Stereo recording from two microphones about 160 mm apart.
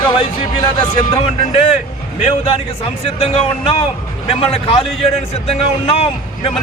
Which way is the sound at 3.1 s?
40° left (ahead or behind).